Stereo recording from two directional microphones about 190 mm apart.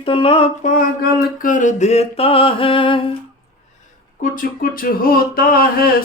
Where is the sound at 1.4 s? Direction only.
45° left (ahead or behind); by 3.1 s 25° left (ahead or behind).